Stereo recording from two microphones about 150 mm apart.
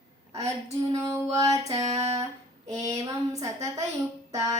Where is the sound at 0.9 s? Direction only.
20° right (ahead or behind).